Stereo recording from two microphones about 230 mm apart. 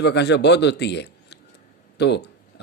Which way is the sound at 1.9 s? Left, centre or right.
Left.